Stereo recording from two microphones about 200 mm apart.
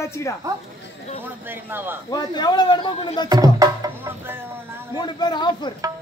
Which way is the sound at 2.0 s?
20° left (ahead or behind).